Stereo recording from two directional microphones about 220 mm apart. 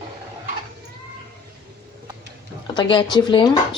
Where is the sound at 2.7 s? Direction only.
20° left (ahead or behind).